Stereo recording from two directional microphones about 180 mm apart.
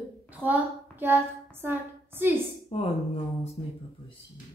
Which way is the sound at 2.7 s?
35° left (ahead or behind).